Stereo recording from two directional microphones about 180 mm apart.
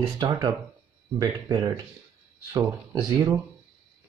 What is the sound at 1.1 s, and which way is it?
Speech, 20° right (ahead or behind).